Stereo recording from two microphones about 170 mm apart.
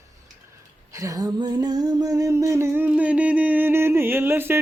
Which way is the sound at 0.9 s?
20° right (ahead or behind).